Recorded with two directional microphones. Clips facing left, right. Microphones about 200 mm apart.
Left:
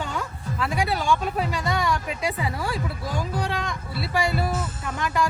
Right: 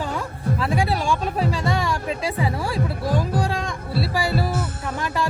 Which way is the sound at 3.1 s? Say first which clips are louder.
Right 4 dB; 30° right (ahead or behind).